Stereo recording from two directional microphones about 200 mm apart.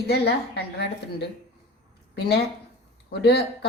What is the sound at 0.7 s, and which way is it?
Speech, 55° left (ahead or behind).